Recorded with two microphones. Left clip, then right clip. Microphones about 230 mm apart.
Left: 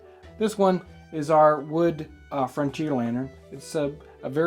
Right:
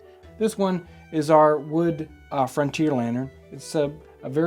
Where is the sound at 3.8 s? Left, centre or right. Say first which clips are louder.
Right 4 dB; right.